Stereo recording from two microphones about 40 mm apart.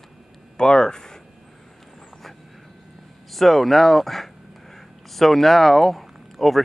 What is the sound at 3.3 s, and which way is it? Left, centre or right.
A man's voice, centre.